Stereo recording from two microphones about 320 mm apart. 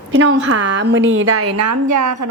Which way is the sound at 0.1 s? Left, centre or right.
Right.